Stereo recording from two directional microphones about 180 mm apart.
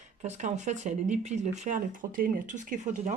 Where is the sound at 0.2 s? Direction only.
40° right (ahead or behind).